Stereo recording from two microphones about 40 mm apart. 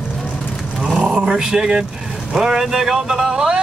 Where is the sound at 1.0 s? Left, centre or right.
Centre.